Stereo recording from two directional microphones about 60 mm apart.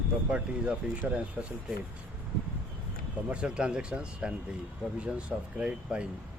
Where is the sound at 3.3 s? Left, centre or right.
Centre.